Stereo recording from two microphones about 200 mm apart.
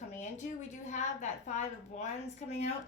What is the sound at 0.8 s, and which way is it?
A woman's voice, 35° left (ahead or behind).